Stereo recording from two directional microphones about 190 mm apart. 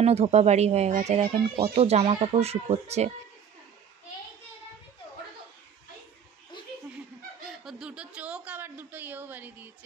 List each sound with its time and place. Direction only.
0.0 s speech: 35° right (ahead or behind)
7.4 s speech: 5° right (ahead or behind)